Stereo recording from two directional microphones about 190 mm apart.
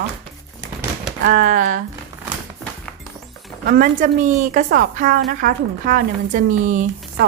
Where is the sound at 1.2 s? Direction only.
45° right (ahead or behind).